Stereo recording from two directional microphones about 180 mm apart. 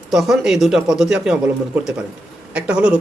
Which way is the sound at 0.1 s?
Centre (ahead or behind).